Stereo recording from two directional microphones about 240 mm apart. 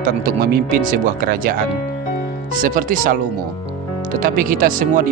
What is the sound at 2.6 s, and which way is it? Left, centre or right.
Speech, right.